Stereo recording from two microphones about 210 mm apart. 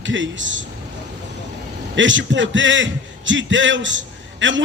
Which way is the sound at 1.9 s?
65° right (ahead or behind).